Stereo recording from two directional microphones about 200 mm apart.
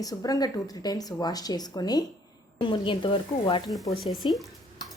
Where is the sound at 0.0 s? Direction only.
20° left (ahead or behind).